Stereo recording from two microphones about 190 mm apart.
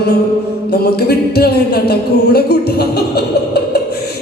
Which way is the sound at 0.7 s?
55° left (ahead or behind).